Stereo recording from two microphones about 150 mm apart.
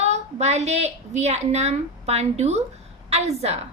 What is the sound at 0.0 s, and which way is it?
A woman's voice, 50° right (ahead or behind).